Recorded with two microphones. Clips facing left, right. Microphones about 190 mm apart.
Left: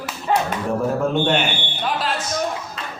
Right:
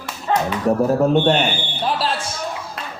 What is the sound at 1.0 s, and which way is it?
Speech, 35° right (ahead or behind).